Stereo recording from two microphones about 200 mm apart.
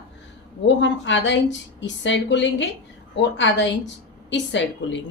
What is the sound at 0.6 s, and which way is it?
Speech, 65° left (ahead or behind).